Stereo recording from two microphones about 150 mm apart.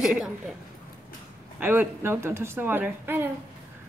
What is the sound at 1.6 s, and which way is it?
A woman's voice, 15° right (ahead or behind).